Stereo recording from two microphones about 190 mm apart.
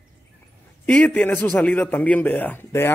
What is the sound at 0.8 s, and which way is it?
A man's voice, 10° left (ahead or behind).